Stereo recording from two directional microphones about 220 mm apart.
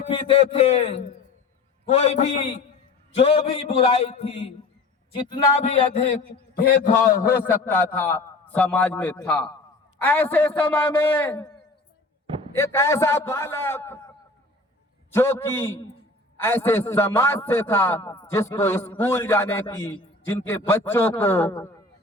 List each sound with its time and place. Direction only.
0.1 s a man's voice: 25° left (ahead or behind)
6.5 s a man's voice: 40° left (ahead or behind)
7.7 s a man's voice: 10° left (ahead or behind)
12.5 s a man's voice: 10° left (ahead or behind)
15.1 s a man's voice: 10° left (ahead or behind)